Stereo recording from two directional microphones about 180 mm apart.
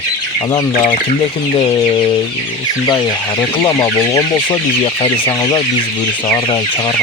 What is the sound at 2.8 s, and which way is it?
Speech, 25° left (ahead or behind).